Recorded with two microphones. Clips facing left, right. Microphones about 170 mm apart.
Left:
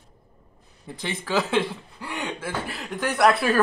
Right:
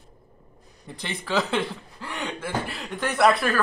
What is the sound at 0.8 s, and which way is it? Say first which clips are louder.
Speech: left 2 dB; centre (ahead or behind).